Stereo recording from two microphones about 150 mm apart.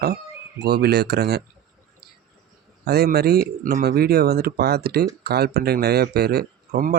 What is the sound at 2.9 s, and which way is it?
A man's voice, 90° right.